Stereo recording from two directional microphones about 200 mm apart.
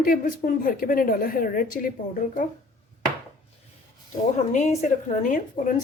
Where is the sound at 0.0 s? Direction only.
45° left (ahead or behind).